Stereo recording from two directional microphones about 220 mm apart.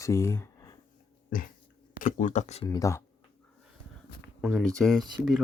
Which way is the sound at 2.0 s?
35° left (ahead or behind).